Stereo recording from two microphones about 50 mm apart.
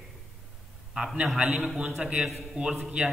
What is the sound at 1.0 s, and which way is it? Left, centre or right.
A man's voice, centre.